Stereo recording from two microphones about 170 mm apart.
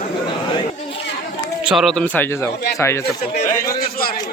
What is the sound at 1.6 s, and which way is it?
Speech, centre (ahead or behind).